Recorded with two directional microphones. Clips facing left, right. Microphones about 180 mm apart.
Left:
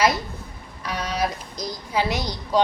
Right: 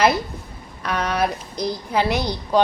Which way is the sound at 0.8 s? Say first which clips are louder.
Right 4 dB; 60° right (ahead or behind).